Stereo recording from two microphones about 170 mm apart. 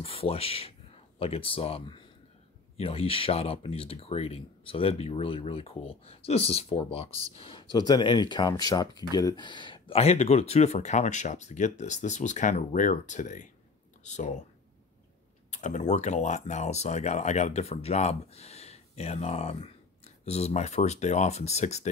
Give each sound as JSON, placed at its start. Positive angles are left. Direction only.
{"t": 0.0, "sound": "speech", "side_deg": 35}
{"t": 15.5, "sound": "speech", "side_deg": 45}